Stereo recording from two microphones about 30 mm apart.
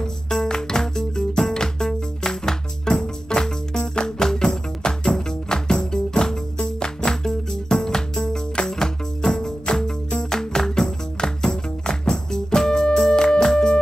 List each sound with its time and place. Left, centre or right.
0.0 s music: left